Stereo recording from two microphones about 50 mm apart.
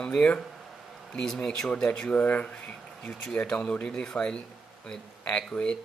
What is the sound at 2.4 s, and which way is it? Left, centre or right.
Speech, centre.